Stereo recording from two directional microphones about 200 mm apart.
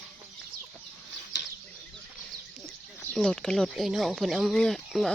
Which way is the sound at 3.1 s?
5° left (ahead or behind).